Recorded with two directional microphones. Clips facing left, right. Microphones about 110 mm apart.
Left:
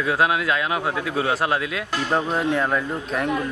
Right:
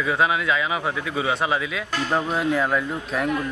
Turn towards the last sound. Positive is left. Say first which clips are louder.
# even
turn(degrees=0)  # may be behind; listen again after turning